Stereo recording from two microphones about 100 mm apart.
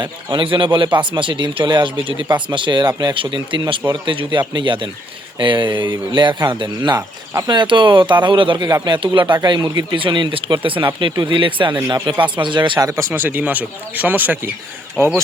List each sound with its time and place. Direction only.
0.0 s speech: 50° right (ahead or behind)
8.6 s speech: 40° right (ahead or behind)
12.8 s speech: 30° right (ahead or behind)
13.1 s speech: 20° right (ahead or behind)